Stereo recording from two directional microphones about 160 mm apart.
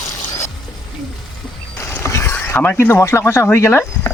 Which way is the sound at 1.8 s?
15° left (ahead or behind).